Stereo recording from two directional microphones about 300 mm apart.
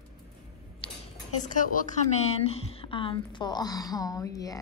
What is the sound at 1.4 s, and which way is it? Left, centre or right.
A woman's voice, left.